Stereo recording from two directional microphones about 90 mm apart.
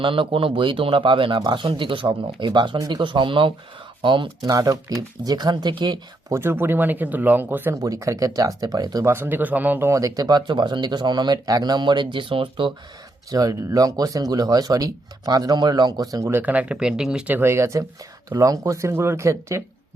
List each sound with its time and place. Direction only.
0.0 s speech: 75° right (ahead or behind)
2.7 s speech: 45° right (ahead or behind)
3.0 s speech: 65° right (ahead or behind)
4.5 s speech: 40° right (ahead or behind)
6.3 s speech: 25° right (ahead or behind)
7.7 s speech: 40° right (ahead or behind)
9.0 s speech: 25° right (ahead or behind); by 12.7 s 70° right (ahead or behind)
13.3 s speech: 40° right (ahead or behind)
16.3 s speech: 15° right (ahead or behind)
17.3 s speech: 30° right (ahead or behind)